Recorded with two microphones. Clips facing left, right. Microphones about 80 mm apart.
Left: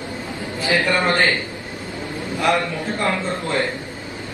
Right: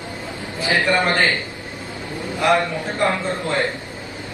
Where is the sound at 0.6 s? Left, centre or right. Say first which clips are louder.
Right 1 dB; right.